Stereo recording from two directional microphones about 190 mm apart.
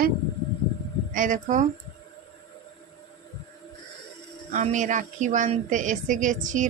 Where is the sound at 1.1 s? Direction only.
45° right (ahead or behind).